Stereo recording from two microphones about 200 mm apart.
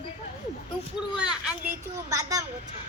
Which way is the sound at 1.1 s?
5° right (ahead or behind).